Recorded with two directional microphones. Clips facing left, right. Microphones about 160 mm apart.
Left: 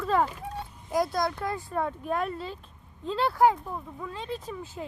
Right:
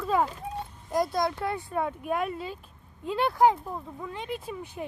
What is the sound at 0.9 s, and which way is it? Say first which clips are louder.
Speech: even; centre (ahead or behind).